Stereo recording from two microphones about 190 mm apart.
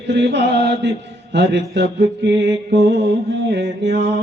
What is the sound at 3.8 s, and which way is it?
Mantra, 65° right (ahead or behind).